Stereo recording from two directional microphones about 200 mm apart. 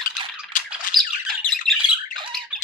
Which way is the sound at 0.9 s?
Centre (ahead or behind).